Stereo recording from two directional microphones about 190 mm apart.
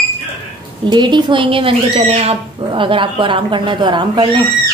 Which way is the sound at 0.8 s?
25° right (ahead or behind).